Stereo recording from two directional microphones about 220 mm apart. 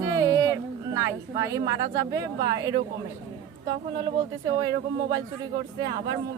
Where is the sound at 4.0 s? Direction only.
20° right (ahead or behind).